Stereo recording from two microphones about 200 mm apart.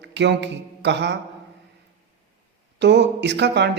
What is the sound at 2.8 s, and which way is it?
Speech, 60° right (ahead or behind).